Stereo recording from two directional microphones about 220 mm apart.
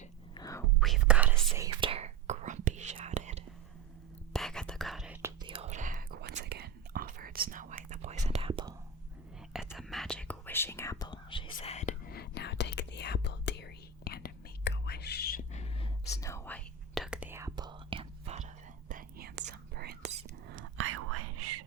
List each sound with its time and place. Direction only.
0.3 s whispering: 15° left (ahead or behind)
0.8 s whispering: centre (ahead or behind)
1.5 s whispering: 20° right (ahead or behind)
4.3 s whispering: centre (ahead or behind)
5.2 s whispering: 20° right (ahead or behind)
9.7 s whispering: centre (ahead or behind); by 15.9 s 30° left (ahead or behind)
16.0 s whispering: 15° left (ahead or behind)
16.9 s whispering: centre (ahead or behind); by 18.4 s 25° right (ahead or behind)
18.9 s whispering: 40° right (ahead or behind)
20.5 s whispering: 65° right (ahead or behind); by 21.6 s 90° right